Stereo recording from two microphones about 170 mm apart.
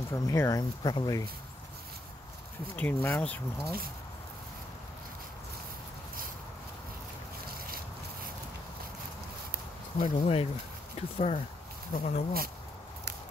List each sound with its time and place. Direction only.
0.1 s speech: 20° left (ahead or behind)
2.7 s speech: 10° left (ahead or behind)
7.6 s a sound: 60° right (ahead or behind)
10.0 s speech: 35° left (ahead or behind)